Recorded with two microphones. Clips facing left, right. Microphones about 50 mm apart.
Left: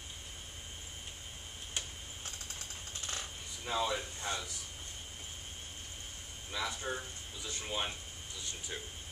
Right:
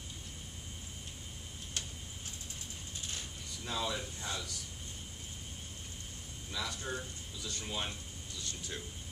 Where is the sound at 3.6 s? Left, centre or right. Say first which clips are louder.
Left 3 dB; centre.